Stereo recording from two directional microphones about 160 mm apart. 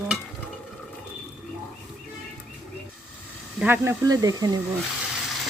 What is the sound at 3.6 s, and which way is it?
Speech, 10° right (ahead or behind).